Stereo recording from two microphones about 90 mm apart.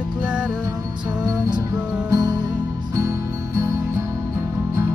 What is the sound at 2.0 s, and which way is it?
Music, 40° right (ahead or behind).